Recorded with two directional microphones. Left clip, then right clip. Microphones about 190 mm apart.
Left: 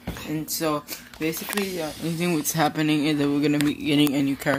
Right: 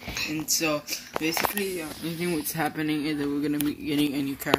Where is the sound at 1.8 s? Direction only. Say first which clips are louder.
Left 4 dB; 50° left (ahead or behind).